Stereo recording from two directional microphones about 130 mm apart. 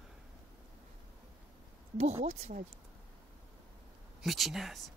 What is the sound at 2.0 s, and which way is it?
Speech, 50° right (ahead or behind).